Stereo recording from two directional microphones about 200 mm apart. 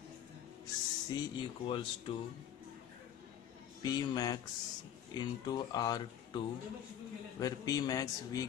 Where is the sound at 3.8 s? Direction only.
20° left (ahead or behind).